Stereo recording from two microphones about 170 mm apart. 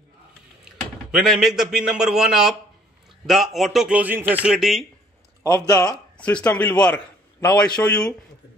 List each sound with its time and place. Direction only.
0.7 s a man's voice: 5° right (ahead or behind)
5.4 s speech: 20° left (ahead or behind)
6.1 s a man's voice: 10° left (ahead or behind)